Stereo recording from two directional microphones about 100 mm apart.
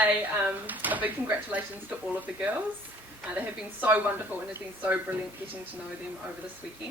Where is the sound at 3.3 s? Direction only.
15° right (ahead or behind).